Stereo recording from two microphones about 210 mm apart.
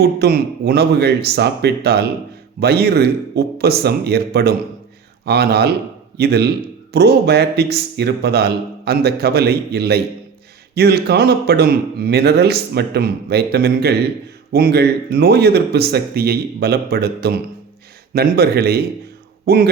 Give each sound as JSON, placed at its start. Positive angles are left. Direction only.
{"t": 0.0, "sound": "speech", "side_deg": -50}